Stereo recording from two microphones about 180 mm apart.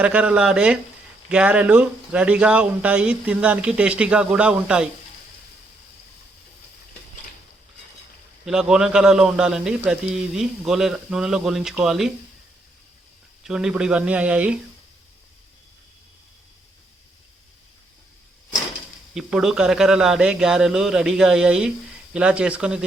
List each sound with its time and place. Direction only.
0.0 s a man's voice: 5° right (ahead or behind)
8.4 s a man's voice: 5° right (ahead or behind)
13.4 s speech: 5° right (ahead or behind)
19.1 s a man's voice: 5° right (ahead or behind)